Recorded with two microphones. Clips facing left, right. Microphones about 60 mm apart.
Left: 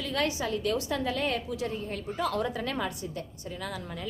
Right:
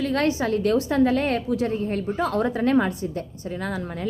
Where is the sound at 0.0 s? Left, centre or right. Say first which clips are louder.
Right 7 dB; right.